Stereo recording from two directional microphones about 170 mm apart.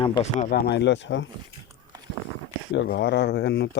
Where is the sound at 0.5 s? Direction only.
75° left (ahead or behind); by 1.3 s 90° left.